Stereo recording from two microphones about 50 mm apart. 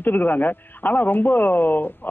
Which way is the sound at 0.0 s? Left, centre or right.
Left.